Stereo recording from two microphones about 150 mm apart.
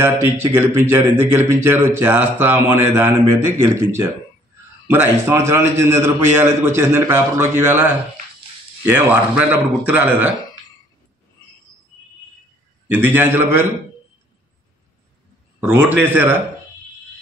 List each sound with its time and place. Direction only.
0.0 s speech: 15° right (ahead or behind)
8.9 s speech: 10° right (ahead or behind)
12.8 s speech: 15° right (ahead or behind)
15.6 s speech: 15° right (ahead or behind)